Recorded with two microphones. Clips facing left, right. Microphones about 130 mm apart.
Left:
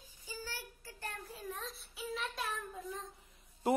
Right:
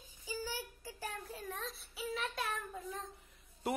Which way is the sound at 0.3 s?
15° right (ahead or behind).